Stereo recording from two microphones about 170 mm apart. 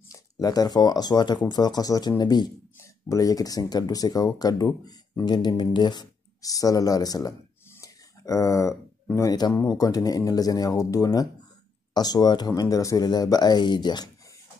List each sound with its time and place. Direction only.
0.1 s speech: 20° left (ahead or behind)